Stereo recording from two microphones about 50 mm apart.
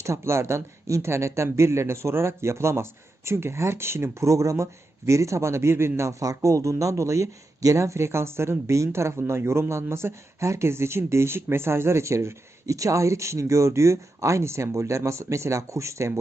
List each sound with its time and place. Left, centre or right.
0.0 s speech: right
6.0 s speech: right